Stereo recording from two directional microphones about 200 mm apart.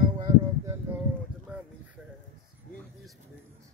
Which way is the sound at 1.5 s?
5° right (ahead or behind).